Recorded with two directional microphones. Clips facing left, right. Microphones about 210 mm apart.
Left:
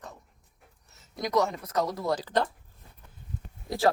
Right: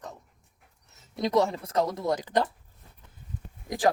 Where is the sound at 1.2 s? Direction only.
25° right (ahead or behind).